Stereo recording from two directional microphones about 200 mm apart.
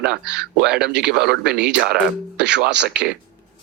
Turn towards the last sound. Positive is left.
turn(degrees=-55)  # may be behind; listen again after turning